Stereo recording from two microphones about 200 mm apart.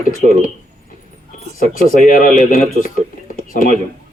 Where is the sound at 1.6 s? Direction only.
45° left (ahead or behind).